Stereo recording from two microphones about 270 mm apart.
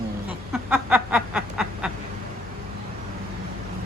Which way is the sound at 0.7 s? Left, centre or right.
Centre.